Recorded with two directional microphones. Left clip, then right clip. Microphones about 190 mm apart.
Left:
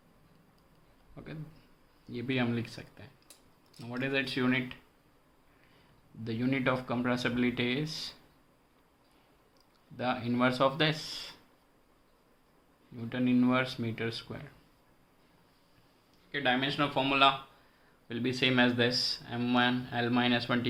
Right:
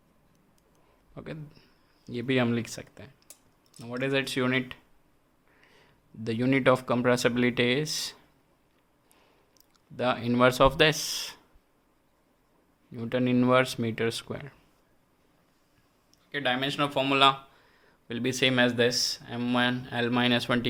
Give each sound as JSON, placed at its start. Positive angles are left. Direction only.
{"t": 1.1, "sound": "a sound", "side_deg": -55}
{"t": 2.0, "sound": "speech", "side_deg": -55}
{"t": 6.2, "sound": "speech", "side_deg": -65}
{"t": 10.0, "sound": "speech", "side_deg": -60}
{"t": 13.0, "sound": "speech", "side_deg": -65}
{"t": 16.3, "sound": "speech", "side_deg": -65}